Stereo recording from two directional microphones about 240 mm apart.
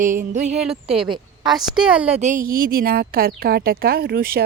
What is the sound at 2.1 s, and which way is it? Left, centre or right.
A woman's voice, right.